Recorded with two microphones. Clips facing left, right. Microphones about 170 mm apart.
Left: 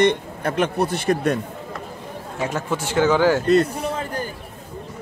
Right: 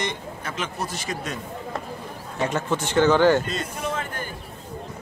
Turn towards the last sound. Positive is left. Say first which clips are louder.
# left 3 dB
turn(degrees=35)  # may be behind; listen again after turning